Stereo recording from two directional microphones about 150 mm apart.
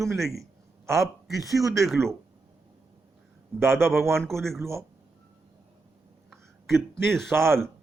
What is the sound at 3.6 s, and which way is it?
Speech, 15° right (ahead or behind).